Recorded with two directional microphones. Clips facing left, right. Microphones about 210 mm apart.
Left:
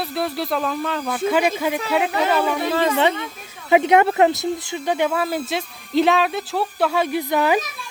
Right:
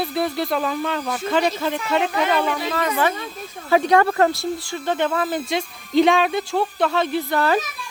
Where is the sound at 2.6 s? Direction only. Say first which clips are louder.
Left 3 dB; 25° left (ahead or behind).